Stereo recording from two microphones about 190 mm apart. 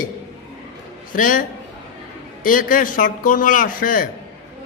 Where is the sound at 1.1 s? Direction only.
45° left (ahead or behind).